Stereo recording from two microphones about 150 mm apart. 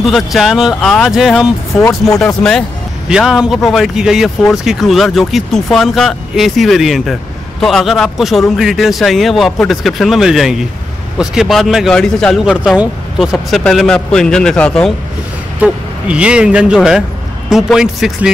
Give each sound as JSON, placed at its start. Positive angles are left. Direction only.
{"t": 0.0, "sound": "speech", "side_deg": 0}
{"t": 1.8, "sound": "speech", "side_deg": 20}
{"t": 2.1, "sound": "speech", "side_deg": 5}
{"t": 15.6, "sound": "speech", "side_deg": -5}